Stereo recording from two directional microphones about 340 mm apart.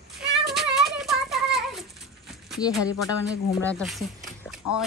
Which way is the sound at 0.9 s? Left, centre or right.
Centre.